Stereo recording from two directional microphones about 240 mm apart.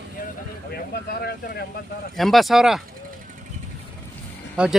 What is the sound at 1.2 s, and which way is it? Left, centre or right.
Speech, left.